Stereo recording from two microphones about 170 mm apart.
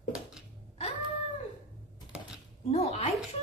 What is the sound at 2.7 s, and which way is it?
Speech, 40° left (ahead or behind).